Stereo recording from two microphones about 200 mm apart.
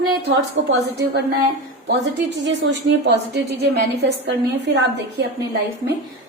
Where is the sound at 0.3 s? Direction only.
60° right (ahead or behind).